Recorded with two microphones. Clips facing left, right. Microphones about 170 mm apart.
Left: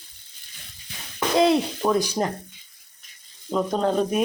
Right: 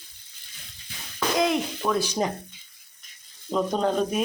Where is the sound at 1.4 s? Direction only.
30° left (ahead or behind).